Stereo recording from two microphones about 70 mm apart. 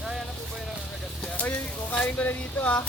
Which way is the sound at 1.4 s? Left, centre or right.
Left.